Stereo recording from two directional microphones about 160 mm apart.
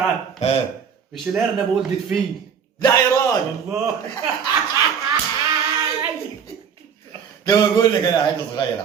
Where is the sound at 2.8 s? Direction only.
20° left (ahead or behind).